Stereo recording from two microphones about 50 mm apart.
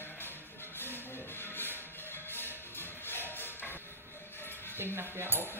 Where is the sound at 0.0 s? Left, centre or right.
Left.